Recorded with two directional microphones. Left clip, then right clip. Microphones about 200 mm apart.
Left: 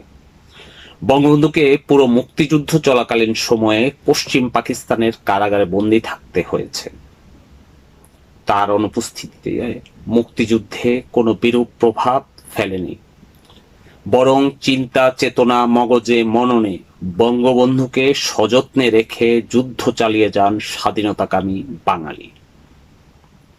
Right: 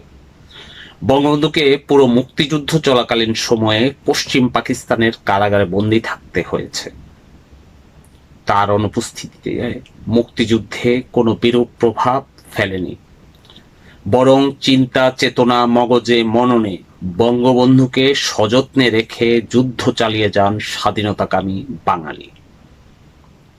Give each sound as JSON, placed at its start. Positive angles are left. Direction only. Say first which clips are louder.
{"t": 1.0, "sound": "speech", "louder": "left 1 dB", "side_deg": 5}
{"t": 8.4, "sound": "speech", "louder": "right 1 dB", "side_deg": 5}
{"t": 14.1, "sound": "speech", "louder": "right 1 dB", "side_deg": 5}